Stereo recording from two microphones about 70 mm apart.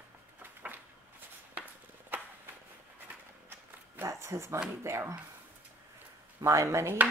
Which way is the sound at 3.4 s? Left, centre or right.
Right.